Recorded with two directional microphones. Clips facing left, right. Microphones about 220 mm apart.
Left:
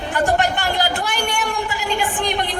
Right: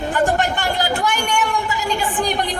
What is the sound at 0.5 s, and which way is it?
Speech, 40° left (ahead or behind).